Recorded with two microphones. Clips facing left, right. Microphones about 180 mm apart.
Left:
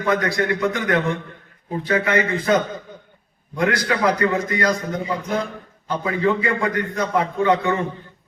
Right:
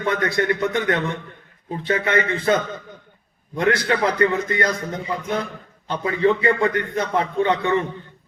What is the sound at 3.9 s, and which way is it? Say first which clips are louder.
Speech: even; 30° right (ahead or behind).